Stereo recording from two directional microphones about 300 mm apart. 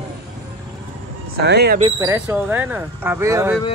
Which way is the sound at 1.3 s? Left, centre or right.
Right.